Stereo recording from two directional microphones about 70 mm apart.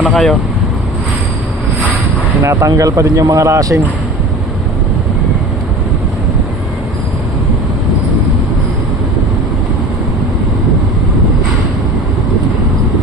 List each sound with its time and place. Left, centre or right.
0.0 s speech: centre
2.5 s speech: right